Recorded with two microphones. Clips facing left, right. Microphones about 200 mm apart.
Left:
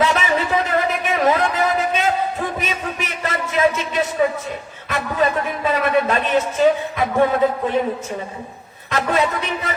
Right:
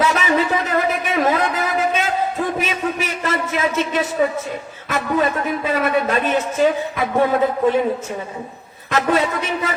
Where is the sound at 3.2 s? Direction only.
50° right (ahead or behind).